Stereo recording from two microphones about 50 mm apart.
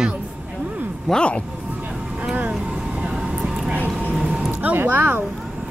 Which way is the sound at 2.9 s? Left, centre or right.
Centre.